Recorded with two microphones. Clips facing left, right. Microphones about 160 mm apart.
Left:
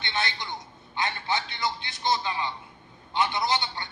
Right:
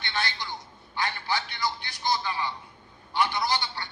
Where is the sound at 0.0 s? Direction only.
20° left (ahead or behind).